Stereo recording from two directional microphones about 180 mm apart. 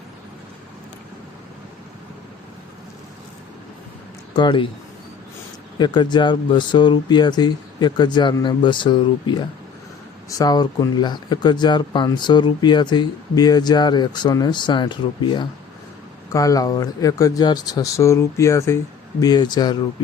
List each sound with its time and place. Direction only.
4.4 s speech: 25° left (ahead or behind)
5.8 s speech: 25° left (ahead or behind)